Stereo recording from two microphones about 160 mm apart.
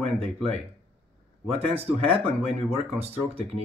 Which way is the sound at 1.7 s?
40° right (ahead or behind).